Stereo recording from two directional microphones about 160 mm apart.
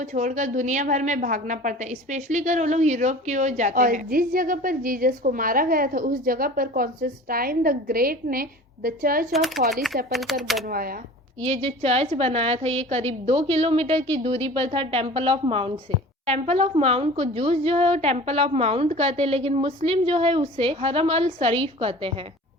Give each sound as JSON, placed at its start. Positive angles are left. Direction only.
{"t": 0.0, "sound": "a woman's voice", "side_deg": -50}
{"t": 9.3, "sound": "speech", "side_deg": 0}
{"t": 10.7, "sound": "speech", "side_deg": -65}
{"t": 11.4, "sound": "a woman's voice", "side_deg": -40}